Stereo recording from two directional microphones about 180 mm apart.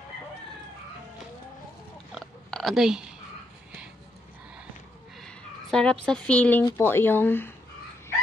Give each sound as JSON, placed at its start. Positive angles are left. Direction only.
{"t": 2.1, "sound": "oink", "side_deg": 0}
{"t": 5.2, "sound": "speech", "side_deg": 5}